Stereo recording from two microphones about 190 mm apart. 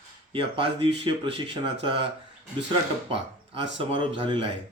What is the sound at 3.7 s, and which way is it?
Speech, 30° right (ahead or behind).